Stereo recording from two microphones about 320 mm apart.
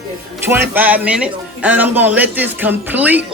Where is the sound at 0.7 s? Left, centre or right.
Centre.